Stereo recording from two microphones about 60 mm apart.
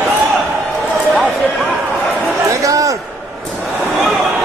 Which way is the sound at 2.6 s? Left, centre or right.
Right.